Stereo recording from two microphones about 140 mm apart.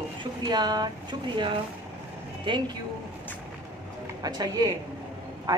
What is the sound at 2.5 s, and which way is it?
Speech, 35° right (ahead or behind).